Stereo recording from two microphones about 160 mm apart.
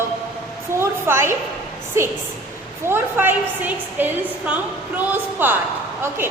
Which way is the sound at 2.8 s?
15° right (ahead or behind).